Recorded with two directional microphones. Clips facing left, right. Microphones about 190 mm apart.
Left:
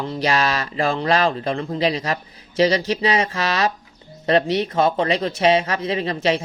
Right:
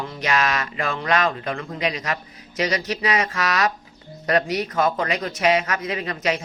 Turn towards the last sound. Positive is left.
turn(degrees=30)  # may be behind; listen again after turning